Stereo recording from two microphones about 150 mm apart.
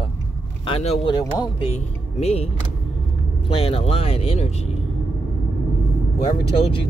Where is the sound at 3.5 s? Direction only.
40° left (ahead or behind).